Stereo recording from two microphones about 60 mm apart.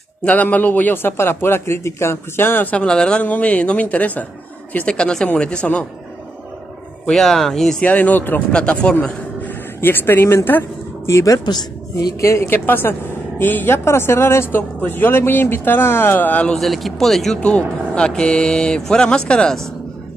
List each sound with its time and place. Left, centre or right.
0.2 s a man's voice: left
2.8 s a woman's voice: centre
7.1 s speech: centre
7.8 s a woman's voice: left
8.5 s a woman's voice: centre
9.8 s a man's voice: left
11.1 s speech: left
12.4 s a man's voice: left
13.8 s a woman's voice: left
16.5 s speech: centre
17.4 s speech: centre